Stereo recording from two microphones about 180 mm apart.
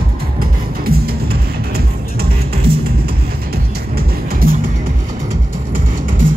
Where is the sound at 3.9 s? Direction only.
55° right (ahead or behind).